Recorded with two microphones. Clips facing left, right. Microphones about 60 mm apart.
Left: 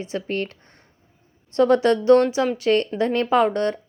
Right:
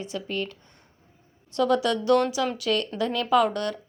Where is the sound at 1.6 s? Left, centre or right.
Left.